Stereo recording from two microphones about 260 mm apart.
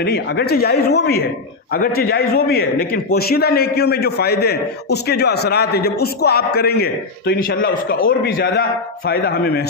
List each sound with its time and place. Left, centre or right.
0.0 s a man's voice: left